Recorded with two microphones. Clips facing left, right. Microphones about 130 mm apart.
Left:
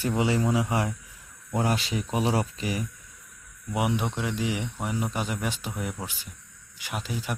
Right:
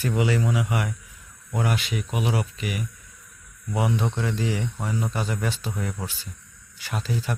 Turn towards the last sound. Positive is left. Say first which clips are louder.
# right 3 dB
turn(degrees=15)  # may be behind; listen again after turning